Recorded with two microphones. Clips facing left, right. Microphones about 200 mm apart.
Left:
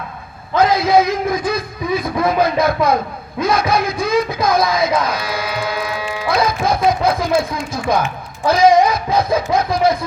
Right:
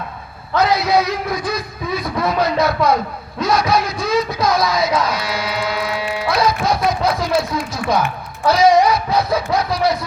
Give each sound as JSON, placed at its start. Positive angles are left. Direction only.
{"t": 0.5, "sound": "speech", "side_deg": 50}
{"t": 8.4, "sound": "speech", "side_deg": 50}